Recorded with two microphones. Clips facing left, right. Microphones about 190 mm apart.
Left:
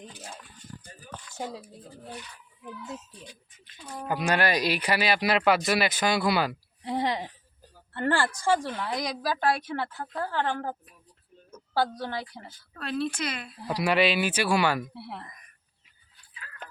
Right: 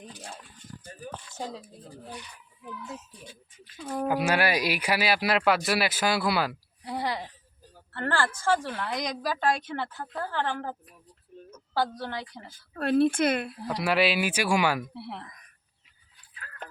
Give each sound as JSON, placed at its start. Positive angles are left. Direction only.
{"t": 3.8, "sound": "speech", "side_deg": -60}
{"t": 4.1, "sound": "speech", "side_deg": -5}
{"t": 6.8, "sound": "a sound", "side_deg": 20}
{"t": 7.9, "sound": "a woman's voice", "side_deg": 15}
{"t": 12.8, "sound": "speech", "side_deg": -55}
{"t": 13.7, "sound": "speech", "side_deg": 0}
{"t": 16.3, "sound": "a sound", "side_deg": -50}